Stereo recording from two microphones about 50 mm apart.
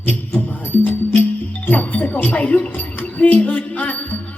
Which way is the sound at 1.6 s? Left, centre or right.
Left.